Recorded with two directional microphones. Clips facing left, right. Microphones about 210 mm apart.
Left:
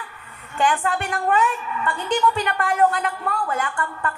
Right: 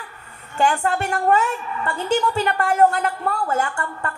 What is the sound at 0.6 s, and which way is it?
A woman's voice, 45° right (ahead or behind).